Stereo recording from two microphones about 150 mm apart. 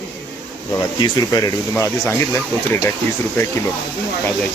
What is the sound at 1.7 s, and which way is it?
Speech, 15° left (ahead or behind).